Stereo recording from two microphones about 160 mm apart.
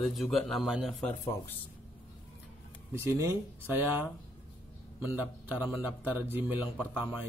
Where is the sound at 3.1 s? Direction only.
15° right (ahead or behind).